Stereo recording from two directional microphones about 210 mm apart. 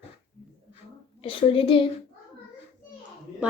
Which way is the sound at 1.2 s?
25° left (ahead or behind).